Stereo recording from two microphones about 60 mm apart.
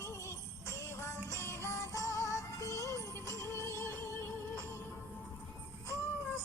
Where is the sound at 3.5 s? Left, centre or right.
Left.